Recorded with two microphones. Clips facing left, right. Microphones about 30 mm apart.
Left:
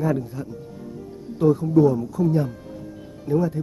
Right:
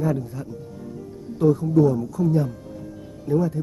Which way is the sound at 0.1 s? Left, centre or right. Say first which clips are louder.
Left 2 dB; centre.